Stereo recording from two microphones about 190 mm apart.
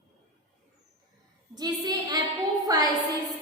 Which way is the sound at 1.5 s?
20° right (ahead or behind).